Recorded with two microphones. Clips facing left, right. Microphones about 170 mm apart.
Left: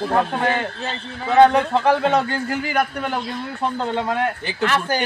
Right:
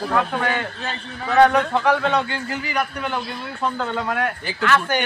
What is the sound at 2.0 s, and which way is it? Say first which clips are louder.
A man's voice: left 3 dB; 45° left (ahead or behind).